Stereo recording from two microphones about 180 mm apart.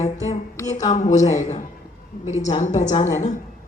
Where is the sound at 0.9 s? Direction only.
45° left (ahead or behind).